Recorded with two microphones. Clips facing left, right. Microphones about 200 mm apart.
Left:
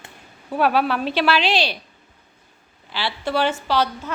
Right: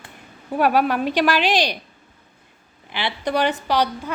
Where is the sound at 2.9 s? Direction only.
20° right (ahead or behind).